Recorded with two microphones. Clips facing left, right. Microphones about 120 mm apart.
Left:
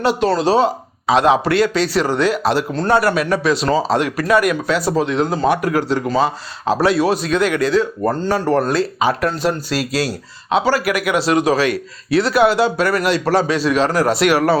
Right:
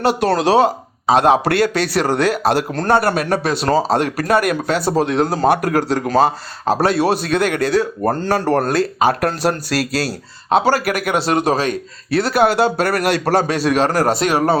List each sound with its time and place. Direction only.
0.2 s a man's voice: 60° right (ahead or behind)
1.0 s a man's voice: 45° right (ahead or behind)
3.7 s a man's voice: 40° right (ahead or behind)